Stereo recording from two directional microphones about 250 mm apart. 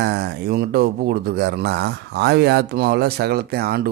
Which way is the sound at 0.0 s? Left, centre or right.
Right.